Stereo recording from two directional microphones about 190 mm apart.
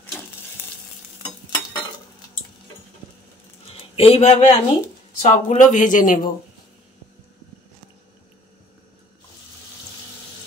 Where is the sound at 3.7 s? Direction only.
30° left (ahead or behind); by 6.3 s 45° left (ahead or behind).